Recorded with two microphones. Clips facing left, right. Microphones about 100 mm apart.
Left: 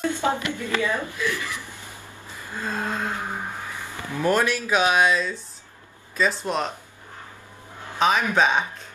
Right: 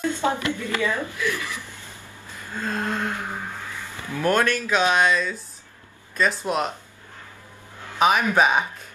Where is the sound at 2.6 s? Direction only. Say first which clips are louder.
Right 1 dB; 5° left (ahead or behind).